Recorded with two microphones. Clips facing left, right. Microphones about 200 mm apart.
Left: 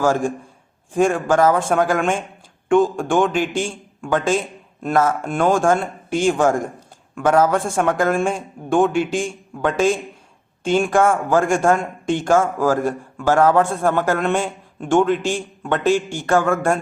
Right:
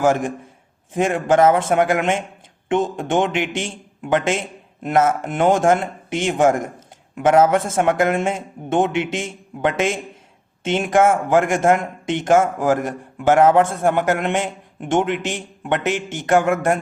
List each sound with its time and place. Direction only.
0.0 s a man's voice: 20° right (ahead or behind)